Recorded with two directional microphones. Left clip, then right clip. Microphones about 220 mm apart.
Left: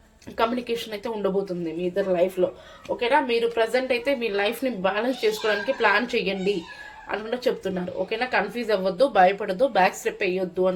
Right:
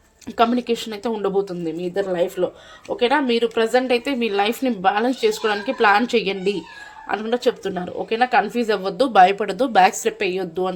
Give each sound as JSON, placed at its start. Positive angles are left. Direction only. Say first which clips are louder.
{"t": 0.3, "sound": "speech", "louder": "right 6 dB", "side_deg": -40}